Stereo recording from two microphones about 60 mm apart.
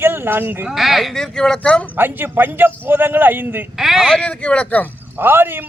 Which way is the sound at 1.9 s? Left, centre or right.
Right.